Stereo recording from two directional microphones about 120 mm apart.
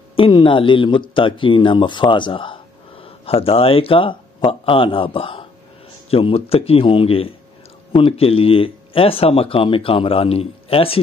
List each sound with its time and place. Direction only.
0.1 s speech: 45° left (ahead or behind)